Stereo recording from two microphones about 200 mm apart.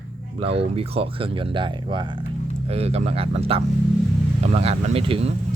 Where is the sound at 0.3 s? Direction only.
30° right (ahead or behind).